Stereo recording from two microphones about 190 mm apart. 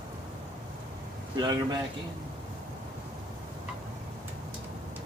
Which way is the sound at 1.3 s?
20° right (ahead or behind).